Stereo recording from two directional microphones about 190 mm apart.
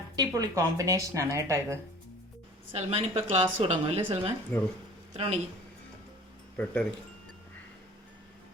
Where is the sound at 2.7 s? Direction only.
30° right (ahead or behind).